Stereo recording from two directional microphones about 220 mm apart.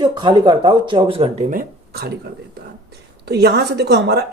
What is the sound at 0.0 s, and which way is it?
Speech, 20° right (ahead or behind).